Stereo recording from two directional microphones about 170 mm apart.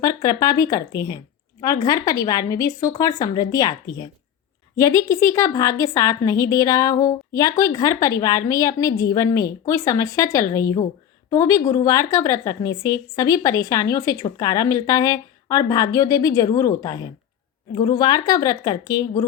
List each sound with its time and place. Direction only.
0.0 s a woman's voice: 20° left (ahead or behind)